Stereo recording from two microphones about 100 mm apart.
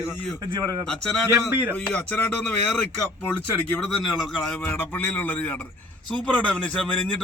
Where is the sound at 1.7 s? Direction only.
15° left (ahead or behind).